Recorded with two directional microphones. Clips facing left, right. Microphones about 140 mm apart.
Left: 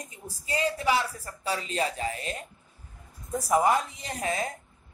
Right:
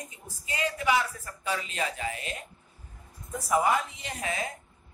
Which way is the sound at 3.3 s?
35° left (ahead or behind).